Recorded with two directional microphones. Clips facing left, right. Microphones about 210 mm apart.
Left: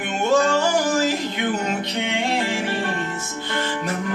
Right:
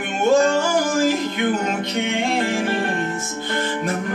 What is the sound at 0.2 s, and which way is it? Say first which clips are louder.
Music: right 2 dB; 50° right (ahead or behind).